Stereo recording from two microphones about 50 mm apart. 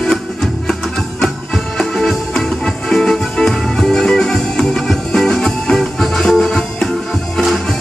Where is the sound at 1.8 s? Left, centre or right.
Centre.